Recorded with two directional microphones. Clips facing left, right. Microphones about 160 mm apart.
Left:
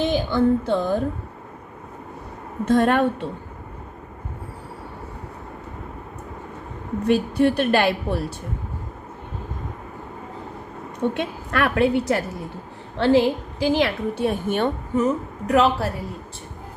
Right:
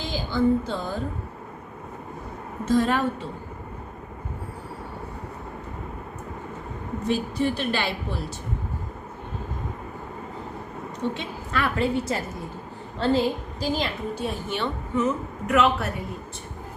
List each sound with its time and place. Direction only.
0.0 s music: 65° left (ahead or behind)
2.6 s a woman's voice: 60° left (ahead or behind)
7.1 s a woman's voice: 55° left (ahead or behind)
11.0 s a woman's voice: 55° left (ahead or behind); by 15.9 s 35° left (ahead or behind)